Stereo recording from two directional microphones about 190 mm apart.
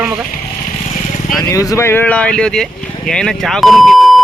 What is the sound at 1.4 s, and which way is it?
Speech, 20° left (ahead or behind).